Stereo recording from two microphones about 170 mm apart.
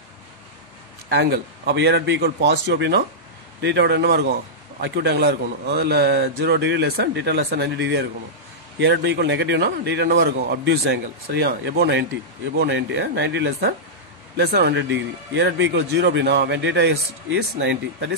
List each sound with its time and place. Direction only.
1.0 s a man's voice: 75° right (ahead or behind)
3.6 s a man's voice: 90° right